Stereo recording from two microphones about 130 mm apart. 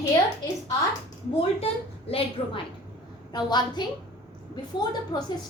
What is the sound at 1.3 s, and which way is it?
A woman's voice, 50° left (ahead or behind).